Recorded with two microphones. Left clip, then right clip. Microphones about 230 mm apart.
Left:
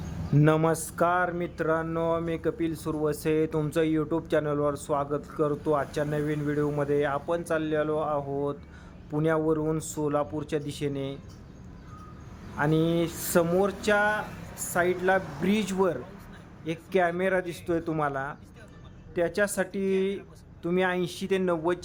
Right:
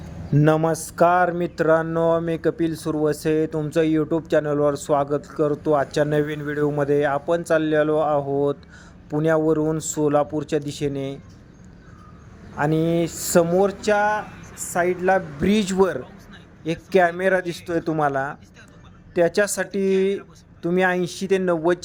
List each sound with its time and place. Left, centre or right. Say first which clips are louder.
0.3 s speech: right 5 dB; centre
12.5 s speech: right 5 dB; centre